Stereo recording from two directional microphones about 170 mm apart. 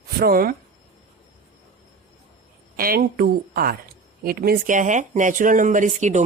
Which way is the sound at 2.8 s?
60° right (ahead or behind).